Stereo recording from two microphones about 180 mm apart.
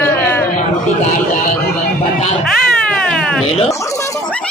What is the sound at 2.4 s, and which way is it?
Cat, 5° left (ahead or behind).